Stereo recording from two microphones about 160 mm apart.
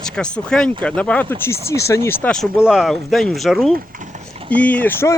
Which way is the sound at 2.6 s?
5° right (ahead or behind).